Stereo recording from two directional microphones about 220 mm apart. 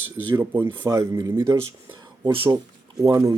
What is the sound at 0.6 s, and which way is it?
Speech, 10° right (ahead or behind).